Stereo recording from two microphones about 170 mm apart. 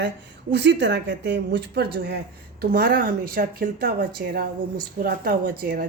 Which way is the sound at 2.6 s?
60° right (ahead or behind).